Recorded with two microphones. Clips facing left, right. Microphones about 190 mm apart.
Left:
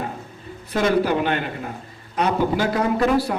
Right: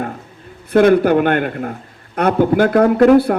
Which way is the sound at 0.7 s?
55° right (ahead or behind).